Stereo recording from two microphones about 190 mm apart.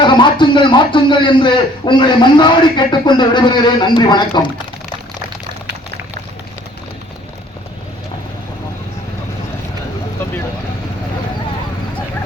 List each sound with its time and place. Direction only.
0.0 s a man's voice: 25° left (ahead or behind)